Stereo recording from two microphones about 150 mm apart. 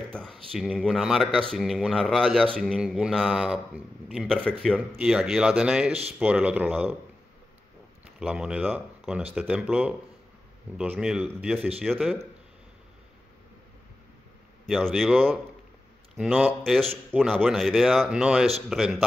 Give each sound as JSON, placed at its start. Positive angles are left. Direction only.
{"t": 0.1, "sound": "speech", "side_deg": 5}
{"t": 8.2, "sound": "speech", "side_deg": -5}
{"t": 14.7, "sound": "speech", "side_deg": 0}